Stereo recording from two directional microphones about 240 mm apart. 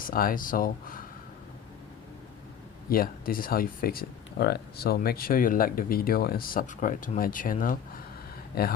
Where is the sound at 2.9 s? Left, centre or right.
Left.